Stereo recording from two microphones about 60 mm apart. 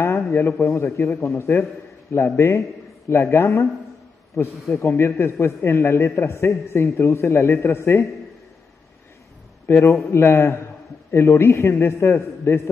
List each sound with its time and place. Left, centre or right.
0.3 s a man's voice: left
9.7 s a man's voice: left